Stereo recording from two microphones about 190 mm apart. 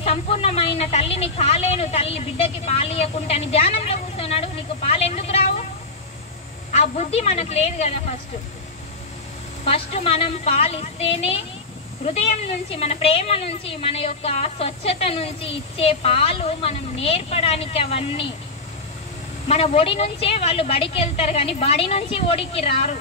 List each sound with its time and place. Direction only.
0.0 s a woman's voice: 30° left (ahead or behind)
6.7 s a woman's voice: 35° left (ahead or behind)
9.7 s a woman's voice: 30° left (ahead or behind)
19.4 s a woman's voice: 35° left (ahead or behind)